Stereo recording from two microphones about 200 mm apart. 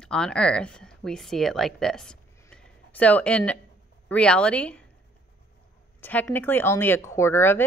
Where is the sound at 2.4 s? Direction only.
5° left (ahead or behind).